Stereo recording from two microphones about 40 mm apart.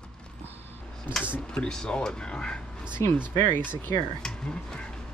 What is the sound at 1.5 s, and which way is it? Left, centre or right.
Speech, centre.